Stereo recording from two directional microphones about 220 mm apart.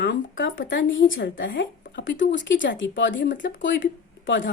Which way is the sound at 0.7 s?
60° left (ahead or behind).